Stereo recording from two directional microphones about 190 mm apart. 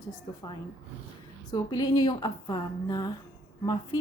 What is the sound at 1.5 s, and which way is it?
Speech, 20° left (ahead or behind).